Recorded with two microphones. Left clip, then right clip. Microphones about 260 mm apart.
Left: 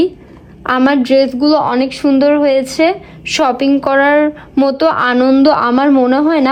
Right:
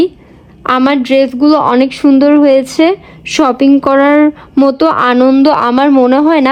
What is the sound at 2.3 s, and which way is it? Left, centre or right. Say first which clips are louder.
A woman's voice: right 4 dB; right.